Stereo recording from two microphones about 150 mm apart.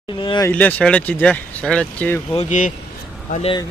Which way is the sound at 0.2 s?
35° left (ahead or behind).